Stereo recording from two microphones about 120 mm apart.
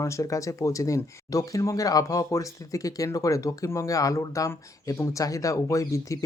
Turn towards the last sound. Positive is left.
turn(degrees=25)  # may be behind; listen again after turning